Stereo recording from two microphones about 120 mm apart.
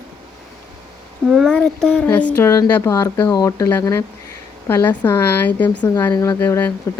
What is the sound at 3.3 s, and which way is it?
Speech, 30° left (ahead or behind).